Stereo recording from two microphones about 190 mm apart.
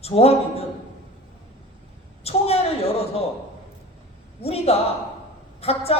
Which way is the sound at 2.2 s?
35° left (ahead or behind).